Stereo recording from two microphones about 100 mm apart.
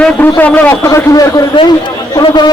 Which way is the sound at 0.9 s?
30° left (ahead or behind).